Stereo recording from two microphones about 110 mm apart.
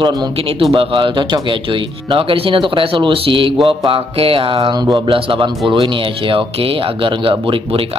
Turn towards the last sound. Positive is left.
turn(degrees=-50)  # may be behind; listen again after turning